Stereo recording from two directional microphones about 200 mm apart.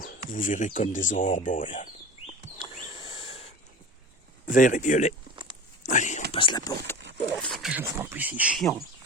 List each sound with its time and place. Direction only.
0.0 s speech: 45° left (ahead or behind)
2.8 s owl: 25° left (ahead or behind)
4.4 s speech: 40° left (ahead or behind)
5.8 s whispering: 40° left (ahead or behind)
6.3 s speech: 25° left (ahead or behind)
7.3 s speech: centre (ahead or behind)